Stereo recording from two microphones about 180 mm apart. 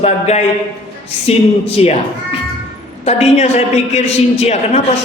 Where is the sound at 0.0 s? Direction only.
35° left (ahead or behind).